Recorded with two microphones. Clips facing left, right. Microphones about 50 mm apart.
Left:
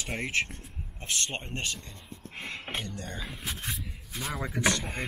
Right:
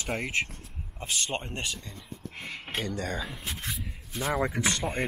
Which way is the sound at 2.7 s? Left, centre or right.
Left.